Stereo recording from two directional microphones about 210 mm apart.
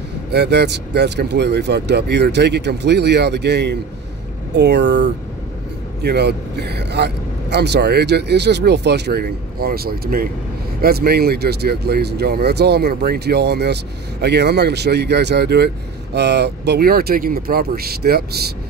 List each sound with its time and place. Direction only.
0.3 s speech: 50° right (ahead or behind)